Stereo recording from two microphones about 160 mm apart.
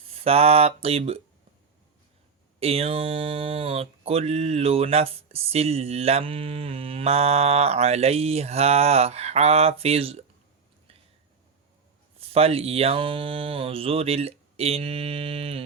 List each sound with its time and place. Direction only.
0.1 s speech: 40° right (ahead or behind)
2.6 s speech: 40° right (ahead or behind)
12.2 s speech: 40° right (ahead or behind)